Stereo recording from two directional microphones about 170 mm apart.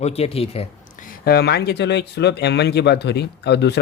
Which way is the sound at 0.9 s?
55° left (ahead or behind).